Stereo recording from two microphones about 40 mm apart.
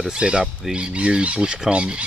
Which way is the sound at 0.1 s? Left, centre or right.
Right.